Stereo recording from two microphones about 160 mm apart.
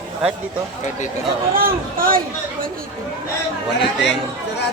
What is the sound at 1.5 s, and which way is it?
Speech, 65° right (ahead or behind).